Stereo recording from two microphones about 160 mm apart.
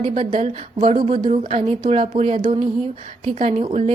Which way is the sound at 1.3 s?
45° right (ahead or behind).